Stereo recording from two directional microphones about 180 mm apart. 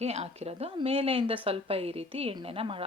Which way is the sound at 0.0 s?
35° right (ahead or behind).